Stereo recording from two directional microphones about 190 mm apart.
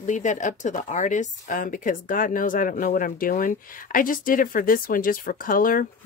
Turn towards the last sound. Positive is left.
turn(degrees=45)  # may be behind; listen again after turning